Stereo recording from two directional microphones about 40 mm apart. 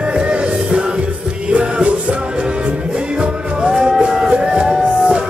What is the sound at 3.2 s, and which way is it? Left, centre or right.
Music, right.